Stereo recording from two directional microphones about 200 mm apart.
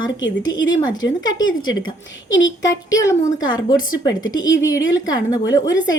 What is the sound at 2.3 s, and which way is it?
Speech, 65° left (ahead or behind).